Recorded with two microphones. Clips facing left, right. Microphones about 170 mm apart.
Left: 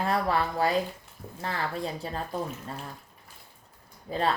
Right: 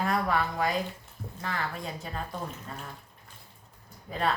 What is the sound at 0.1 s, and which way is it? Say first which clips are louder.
Speech: left 1 dB; 30° left (ahead or behind).